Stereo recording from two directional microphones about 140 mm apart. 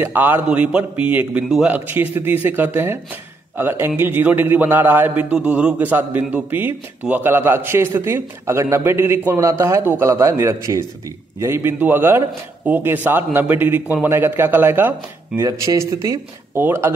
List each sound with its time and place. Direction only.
0.0 s a man's voice: 15° right (ahead or behind)